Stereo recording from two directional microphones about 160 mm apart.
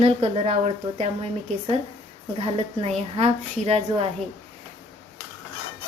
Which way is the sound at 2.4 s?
35° right (ahead or behind).